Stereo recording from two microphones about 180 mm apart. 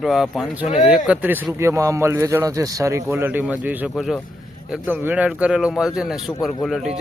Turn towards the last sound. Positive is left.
turn(degrees=0)  # may be behind; listen again after turning